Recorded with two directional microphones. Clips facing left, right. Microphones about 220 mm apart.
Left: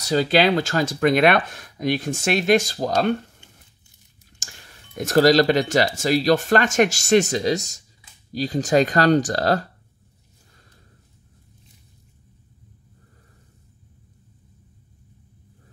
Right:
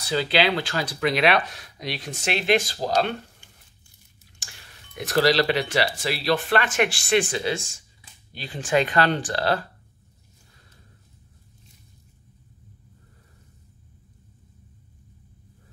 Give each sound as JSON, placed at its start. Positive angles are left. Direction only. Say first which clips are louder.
{"t": 0.0, "sound": "speech", "louder": "left 4 dB", "side_deg": 40}
{"t": 4.4, "sound": "speech", "louder": "left 3 dB", "side_deg": 45}